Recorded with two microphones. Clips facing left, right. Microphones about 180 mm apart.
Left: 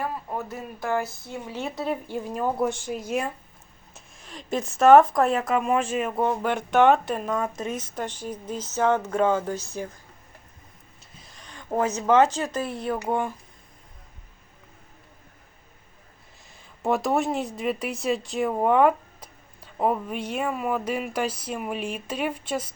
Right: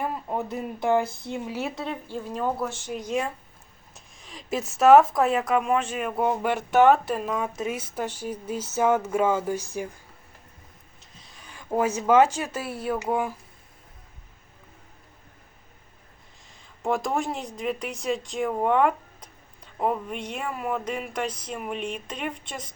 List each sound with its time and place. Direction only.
0.0 s speech: 20° right (ahead or behind)
1.6 s speech: centre (ahead or behind)
2.0 s speech: 15° left (ahead or behind)
6.2 s speech: 10° right (ahead or behind)
11.2 s speech: centre (ahead or behind)
16.8 s speech: 5° left (ahead or behind)